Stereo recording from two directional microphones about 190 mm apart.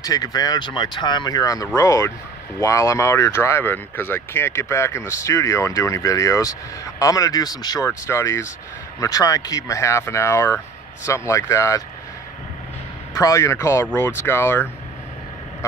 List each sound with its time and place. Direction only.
0.0 s speech: 20° left (ahead or behind)
13.2 s speech: 15° left (ahead or behind)